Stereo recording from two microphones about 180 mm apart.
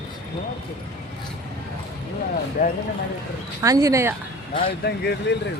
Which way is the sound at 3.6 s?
20° right (ahead or behind).